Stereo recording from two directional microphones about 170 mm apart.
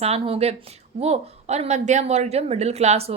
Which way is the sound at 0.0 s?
35° right (ahead or behind).